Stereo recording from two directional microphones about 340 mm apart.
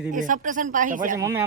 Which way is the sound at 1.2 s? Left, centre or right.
Centre.